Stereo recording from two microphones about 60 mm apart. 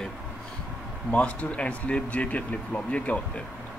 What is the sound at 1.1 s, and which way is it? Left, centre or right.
Speech, left.